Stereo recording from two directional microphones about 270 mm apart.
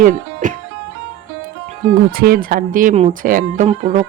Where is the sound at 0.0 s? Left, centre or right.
Right.